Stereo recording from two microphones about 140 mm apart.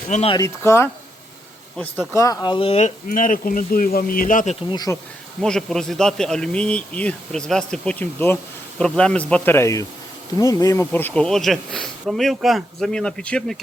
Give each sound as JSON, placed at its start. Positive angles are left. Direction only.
{"t": 0.3, "sound": "speech", "side_deg": 20}
{"t": 2.2, "sound": "speech", "side_deg": 30}
{"t": 3.1, "sound": "speech", "side_deg": 75}
{"t": 4.7, "sound": "speech", "side_deg": 30}
{"t": 5.4, "sound": "speech", "side_deg": 5}